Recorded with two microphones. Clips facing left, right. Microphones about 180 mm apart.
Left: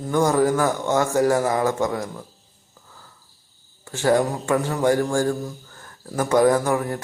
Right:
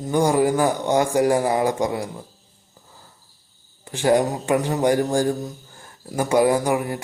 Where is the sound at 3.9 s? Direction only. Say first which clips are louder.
Right 1 dB; 15° right (ahead or behind).